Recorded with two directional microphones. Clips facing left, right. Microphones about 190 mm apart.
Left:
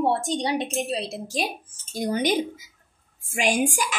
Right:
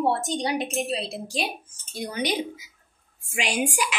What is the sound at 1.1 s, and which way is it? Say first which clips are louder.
Speech: left 1 dB; 45° left (ahead or behind).